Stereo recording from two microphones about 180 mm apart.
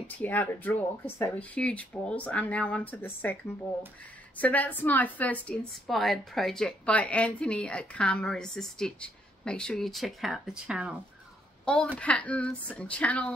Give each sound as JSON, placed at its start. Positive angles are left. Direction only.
{"t": 0.2, "sound": "speech", "side_deg": 10}
{"t": 4.4, "sound": "a woman's voice", "side_deg": 10}